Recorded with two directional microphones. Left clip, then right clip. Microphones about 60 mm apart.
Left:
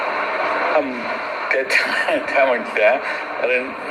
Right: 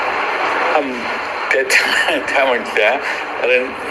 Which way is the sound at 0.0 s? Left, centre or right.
Right.